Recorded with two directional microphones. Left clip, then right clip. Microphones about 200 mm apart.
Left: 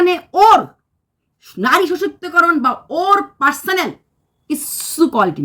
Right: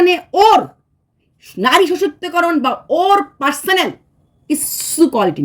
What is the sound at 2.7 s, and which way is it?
Speech, 35° left (ahead or behind).